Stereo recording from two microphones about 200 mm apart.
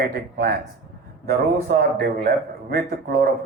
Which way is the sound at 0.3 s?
50° right (ahead or behind).